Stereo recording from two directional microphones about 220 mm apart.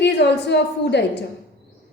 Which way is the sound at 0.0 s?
50° left (ahead or behind).